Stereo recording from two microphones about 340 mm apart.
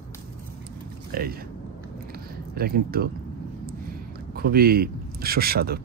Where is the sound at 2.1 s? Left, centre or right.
Right.